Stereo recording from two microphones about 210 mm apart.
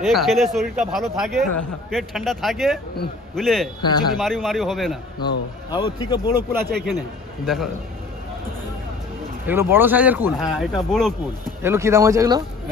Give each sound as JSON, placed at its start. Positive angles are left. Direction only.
{"t": 0.0, "sound": "a man's voice", "side_deg": 0}
{"t": 3.8, "sound": "speech", "side_deg": 20}
{"t": 4.2, "sound": "a man's voice", "side_deg": 0}
{"t": 5.2, "sound": "speech", "side_deg": 20}
{"t": 7.4, "sound": "a man's voice", "side_deg": 0}
{"t": 9.5, "sound": "a man's voice", "side_deg": -10}
{"t": 11.6, "sound": "speech", "side_deg": -10}